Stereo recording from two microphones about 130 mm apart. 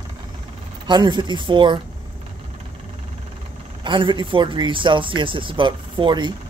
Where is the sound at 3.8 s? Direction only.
40° right (ahead or behind).